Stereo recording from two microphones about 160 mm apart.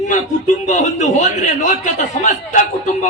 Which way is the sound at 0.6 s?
50° left (ahead or behind).